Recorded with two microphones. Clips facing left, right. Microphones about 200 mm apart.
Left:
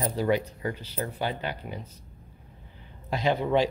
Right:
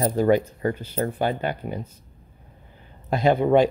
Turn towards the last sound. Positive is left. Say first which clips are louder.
# right 7 dB
turn(degrees=-50)  # may be behind; listen again after turning